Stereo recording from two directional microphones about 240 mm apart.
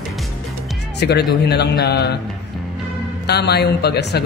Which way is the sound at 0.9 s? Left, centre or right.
Left.